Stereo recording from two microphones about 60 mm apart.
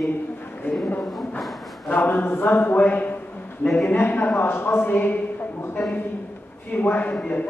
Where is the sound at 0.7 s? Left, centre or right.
Left.